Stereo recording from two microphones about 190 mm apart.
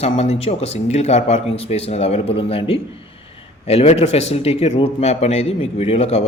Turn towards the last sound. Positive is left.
turn(degrees=30)  # may be behind; listen again after turning